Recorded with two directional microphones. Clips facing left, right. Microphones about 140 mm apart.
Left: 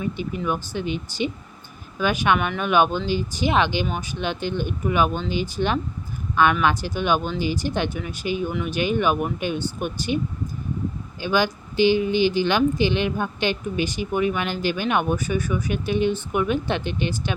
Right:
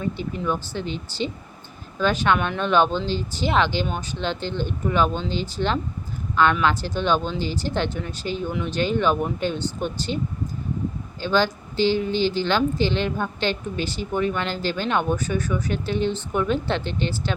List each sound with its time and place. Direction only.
0.0 s speech: 15° left (ahead or behind)
11.2 s speech: 15° left (ahead or behind)